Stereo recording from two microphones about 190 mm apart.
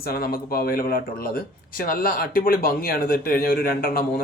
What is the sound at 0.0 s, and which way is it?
Speech, 55° left (ahead or behind).